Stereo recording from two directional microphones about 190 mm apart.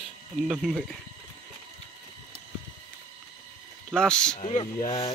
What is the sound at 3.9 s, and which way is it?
Speech, 5° left (ahead or behind).